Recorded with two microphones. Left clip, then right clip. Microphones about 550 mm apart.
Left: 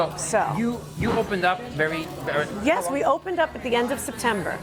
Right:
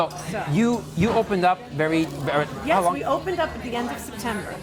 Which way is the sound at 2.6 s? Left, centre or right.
Left.